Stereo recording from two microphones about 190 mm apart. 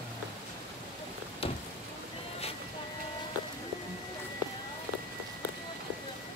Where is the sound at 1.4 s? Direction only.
30° left (ahead or behind).